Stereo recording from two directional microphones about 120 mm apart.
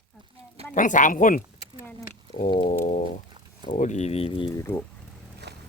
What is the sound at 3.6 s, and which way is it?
Speech, 80° left.